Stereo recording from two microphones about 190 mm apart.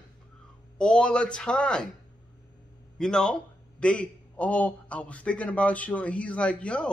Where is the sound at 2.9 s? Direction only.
5° left (ahead or behind).